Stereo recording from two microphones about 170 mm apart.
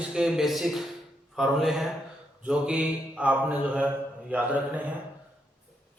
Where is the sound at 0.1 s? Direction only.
5° right (ahead or behind).